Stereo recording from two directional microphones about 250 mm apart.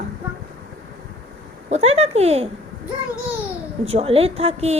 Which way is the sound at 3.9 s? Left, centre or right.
Right.